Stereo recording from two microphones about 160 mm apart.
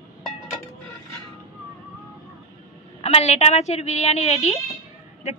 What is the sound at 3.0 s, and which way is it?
A woman's voice, 40° left (ahead or behind).